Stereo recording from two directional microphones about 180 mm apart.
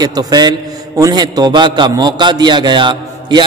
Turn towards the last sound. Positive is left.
turn(degrees=-25)  # may be behind; listen again after turning